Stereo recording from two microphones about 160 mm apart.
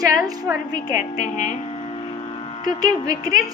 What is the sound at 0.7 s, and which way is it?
Speech, 60° left (ahead or behind).